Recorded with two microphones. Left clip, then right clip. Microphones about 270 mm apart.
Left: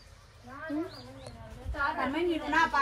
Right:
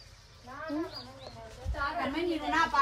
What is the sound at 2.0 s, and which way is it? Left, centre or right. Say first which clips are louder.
Speech: left 1 dB; centre.